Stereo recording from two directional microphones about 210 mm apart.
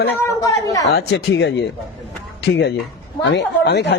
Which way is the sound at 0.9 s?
55° left (ahead or behind).